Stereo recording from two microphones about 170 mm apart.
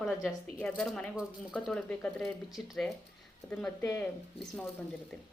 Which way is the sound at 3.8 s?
15° left (ahead or behind).